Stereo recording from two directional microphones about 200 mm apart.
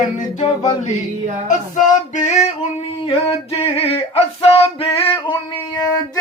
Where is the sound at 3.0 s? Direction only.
30° left (ahead or behind).